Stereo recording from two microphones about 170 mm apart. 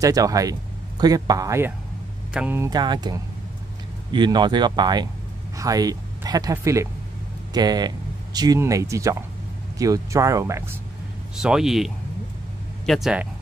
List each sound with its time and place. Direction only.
0.0 s speech: 20° right (ahead or behind)
2.7 s speech: 25° right (ahead or behind)
11.3 s speech: 5° right (ahead or behind)